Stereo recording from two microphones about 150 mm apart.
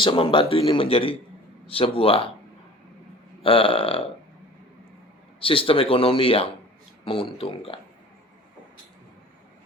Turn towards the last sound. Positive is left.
turn(degrees=40)  # may be behind; listen again after turning